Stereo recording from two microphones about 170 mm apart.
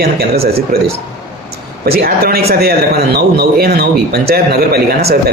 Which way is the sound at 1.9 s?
65° right (ahead or behind).